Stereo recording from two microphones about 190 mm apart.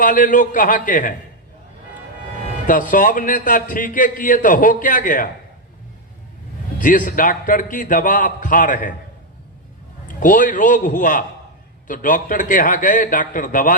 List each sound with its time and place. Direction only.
0.0 s a man's voice: 45° left (ahead or behind)
2.6 s a man's voice: 45° left (ahead or behind)
6.7 s a man's voice: 45° left (ahead or behind)
10.2 s a man's voice: 45° left (ahead or behind)